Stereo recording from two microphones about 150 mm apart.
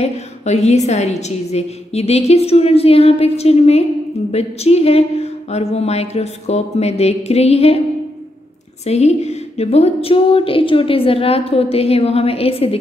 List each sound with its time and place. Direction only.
0.0 s a woman's voice: 45° left (ahead or behind)
8.8 s speech: 45° left (ahead or behind)